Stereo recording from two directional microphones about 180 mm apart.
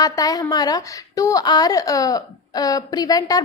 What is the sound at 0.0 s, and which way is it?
A woman's voice, 20° left (ahead or behind).